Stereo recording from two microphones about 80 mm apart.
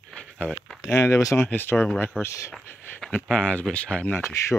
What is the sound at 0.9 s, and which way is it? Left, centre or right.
Speech, left.